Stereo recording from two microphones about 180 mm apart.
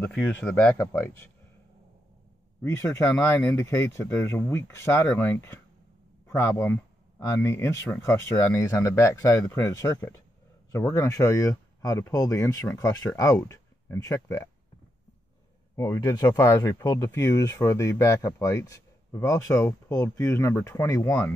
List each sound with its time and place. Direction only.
0.0 s speech: 5° left (ahead or behind)
2.6 s speech: 15° left (ahead or behind)
15.7 s speech: 15° left (ahead or behind)